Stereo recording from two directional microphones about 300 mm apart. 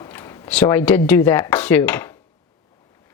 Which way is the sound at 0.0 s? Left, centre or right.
Centre.